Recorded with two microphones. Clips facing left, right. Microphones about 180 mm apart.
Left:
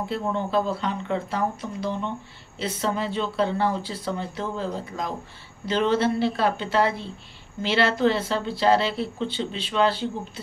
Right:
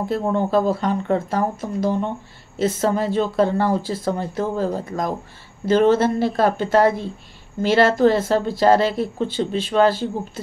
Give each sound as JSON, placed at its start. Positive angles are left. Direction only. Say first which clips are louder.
{"t": 0.1, "sound": "speech", "louder": "right 6 dB", "side_deg": -45}